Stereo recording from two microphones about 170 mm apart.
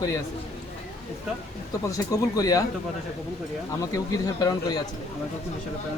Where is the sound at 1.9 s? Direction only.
20° left (ahead or behind).